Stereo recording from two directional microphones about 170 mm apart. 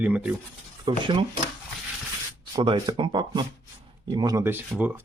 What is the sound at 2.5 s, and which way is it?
Speech, 25° right (ahead or behind).